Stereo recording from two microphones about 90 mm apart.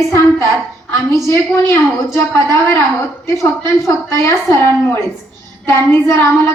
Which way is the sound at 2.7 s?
30° left (ahead or behind).